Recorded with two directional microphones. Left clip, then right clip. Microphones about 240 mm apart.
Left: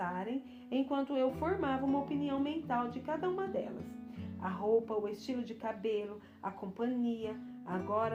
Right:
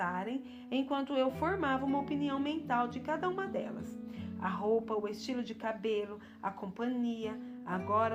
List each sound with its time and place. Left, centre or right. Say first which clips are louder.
0.0 s a woman's voice: right 2 dB; right